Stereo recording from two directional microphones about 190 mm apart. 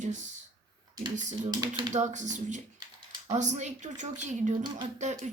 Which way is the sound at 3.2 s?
40° right (ahead or behind).